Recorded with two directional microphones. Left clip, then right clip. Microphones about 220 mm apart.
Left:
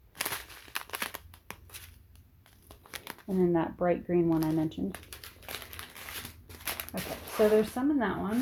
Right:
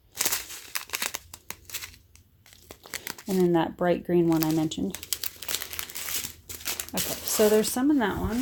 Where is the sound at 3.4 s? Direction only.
35° right (ahead or behind).